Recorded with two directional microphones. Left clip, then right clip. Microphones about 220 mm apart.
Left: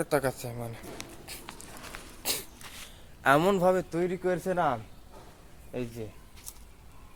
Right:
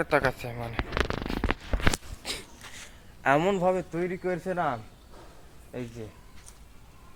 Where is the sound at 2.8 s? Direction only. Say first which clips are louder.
Even; 10° left (ahead or behind).